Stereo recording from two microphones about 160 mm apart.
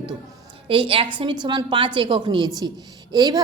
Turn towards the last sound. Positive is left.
turn(degrees=-25)  # may be behind; listen again after turning